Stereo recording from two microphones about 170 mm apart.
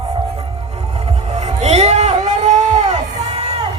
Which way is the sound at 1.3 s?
40° right (ahead or behind).